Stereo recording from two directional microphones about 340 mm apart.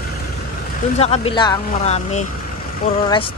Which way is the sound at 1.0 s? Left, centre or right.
Centre.